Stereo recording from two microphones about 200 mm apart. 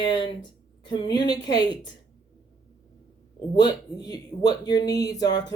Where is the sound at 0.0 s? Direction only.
20° left (ahead or behind).